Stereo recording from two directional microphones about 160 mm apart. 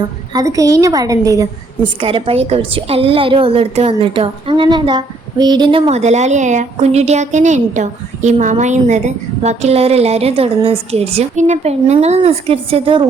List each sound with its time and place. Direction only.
0.3 s a woman's voice: 20° right (ahead or behind)
2.0 s a woman's voice: 35° right (ahead or behind)